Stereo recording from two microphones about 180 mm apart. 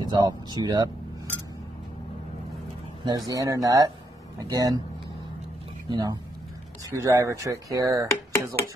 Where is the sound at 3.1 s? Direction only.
20° right (ahead or behind).